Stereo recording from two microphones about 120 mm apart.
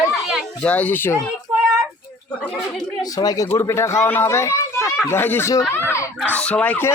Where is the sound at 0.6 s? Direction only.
10° left (ahead or behind).